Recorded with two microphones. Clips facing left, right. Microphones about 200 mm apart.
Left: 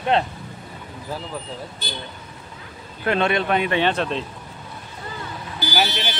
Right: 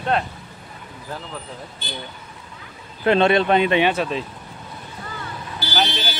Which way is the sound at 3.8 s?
5° right (ahead or behind).